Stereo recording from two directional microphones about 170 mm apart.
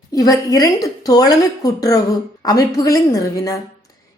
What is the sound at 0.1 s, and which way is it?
A woman's voice, 20° left (ahead or behind).